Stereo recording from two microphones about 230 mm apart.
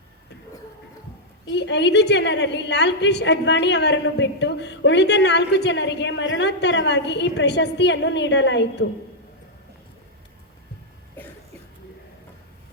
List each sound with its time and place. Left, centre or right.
1.5 s a woman's voice: left